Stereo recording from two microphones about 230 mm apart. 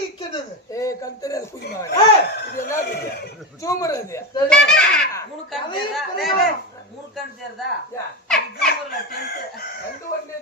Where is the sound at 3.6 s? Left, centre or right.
Centre.